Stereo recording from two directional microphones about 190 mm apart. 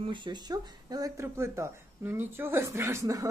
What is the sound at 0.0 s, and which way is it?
Speech, 25° right (ahead or behind).